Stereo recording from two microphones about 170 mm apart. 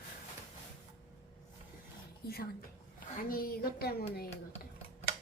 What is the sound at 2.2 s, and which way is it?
Speech, 65° left (ahead or behind).